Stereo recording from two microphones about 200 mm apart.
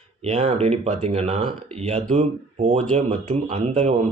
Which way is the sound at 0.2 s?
35° right (ahead or behind).